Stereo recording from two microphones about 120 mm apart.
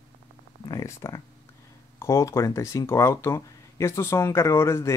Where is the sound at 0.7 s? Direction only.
25° left (ahead or behind).